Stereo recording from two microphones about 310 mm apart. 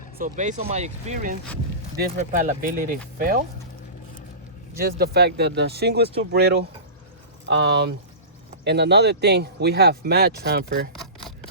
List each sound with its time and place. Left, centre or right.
0.2 s speech: right
4.8 s speech: right
10.9 s a sound: centre